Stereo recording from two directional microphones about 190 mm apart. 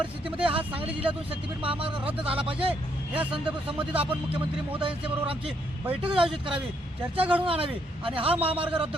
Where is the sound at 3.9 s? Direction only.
30° right (ahead or behind).